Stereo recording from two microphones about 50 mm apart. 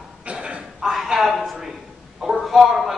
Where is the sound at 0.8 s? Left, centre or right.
Centre.